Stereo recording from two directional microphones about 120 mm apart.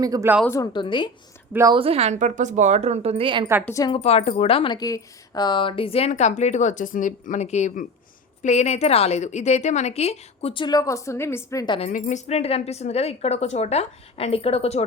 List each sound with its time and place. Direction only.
0.0 s speech: 30° right (ahead or behind)
0.6 s a woman's voice: 40° left (ahead or behind)
1.7 s a woman's voice: 55° right (ahead or behind)
3.9 s a woman's voice: 60° left (ahead or behind)
4.8 s a woman's voice: 30° left (ahead or behind)
11.8 s a woman's voice: 90° left; by 14.8 s 60° left (ahead or behind)